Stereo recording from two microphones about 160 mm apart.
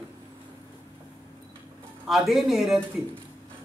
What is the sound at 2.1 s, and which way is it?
Speech, centre (ahead or behind).